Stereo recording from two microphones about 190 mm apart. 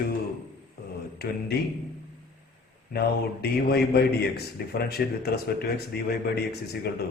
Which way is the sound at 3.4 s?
55° left (ahead or behind).